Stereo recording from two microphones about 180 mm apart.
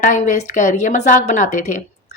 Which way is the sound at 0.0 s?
40° left (ahead or behind).